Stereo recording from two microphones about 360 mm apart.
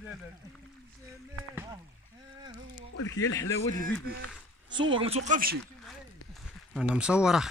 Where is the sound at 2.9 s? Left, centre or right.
Left.